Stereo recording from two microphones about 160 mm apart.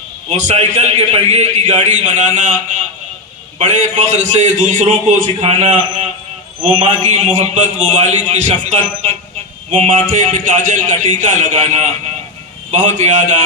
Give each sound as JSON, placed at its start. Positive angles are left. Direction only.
{"t": 0.3, "sound": "a man's voice", "side_deg": -45}
{"t": 3.9, "sound": "a man's voice", "side_deg": -50}
{"t": 7.1, "sound": "a man's voice", "side_deg": -50}